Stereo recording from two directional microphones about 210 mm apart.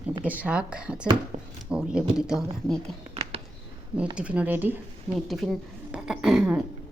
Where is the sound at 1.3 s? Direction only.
30° right (ahead or behind).